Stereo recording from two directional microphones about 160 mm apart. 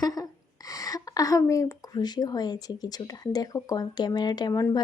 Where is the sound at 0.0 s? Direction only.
25° left (ahead or behind).